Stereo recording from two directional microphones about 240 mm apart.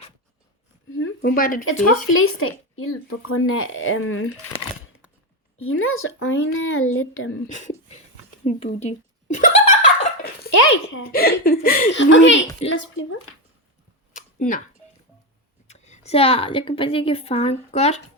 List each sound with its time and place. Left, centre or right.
1.2 s speech: left
2.0 s speech: left
5.5 s speech: left
7.5 s speech: left
8.4 s giggle: left
10.7 s speech: left
11.1 s speech: left
11.9 s a woman's voice: left
14.1 s a sound: left
15.6 s a woman's voice: left